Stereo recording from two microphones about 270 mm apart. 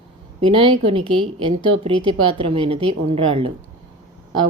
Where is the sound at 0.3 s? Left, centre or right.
Centre.